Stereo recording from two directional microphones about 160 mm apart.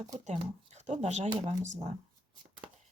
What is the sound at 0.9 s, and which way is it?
Speech, 45° right (ahead or behind).